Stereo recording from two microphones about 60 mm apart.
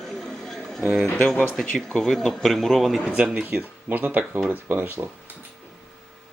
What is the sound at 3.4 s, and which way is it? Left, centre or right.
Speech, right.